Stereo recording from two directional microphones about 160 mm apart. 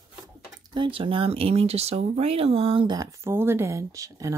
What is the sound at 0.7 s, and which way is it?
Speech, 30° right (ahead or behind).